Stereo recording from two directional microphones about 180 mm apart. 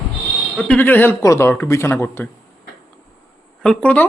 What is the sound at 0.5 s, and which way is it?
A man's voice, 10° left (ahead or behind).